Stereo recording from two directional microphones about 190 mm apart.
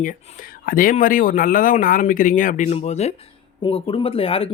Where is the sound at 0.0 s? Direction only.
45° left (ahead or behind).